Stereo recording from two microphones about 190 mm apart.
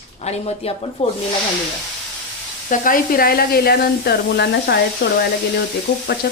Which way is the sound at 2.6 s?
45° left (ahead or behind).